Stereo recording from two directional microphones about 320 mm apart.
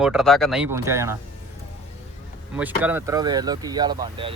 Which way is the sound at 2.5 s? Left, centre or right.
Centre.